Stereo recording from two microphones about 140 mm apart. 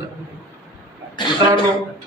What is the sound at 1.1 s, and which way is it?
Speech, 35° left (ahead or behind).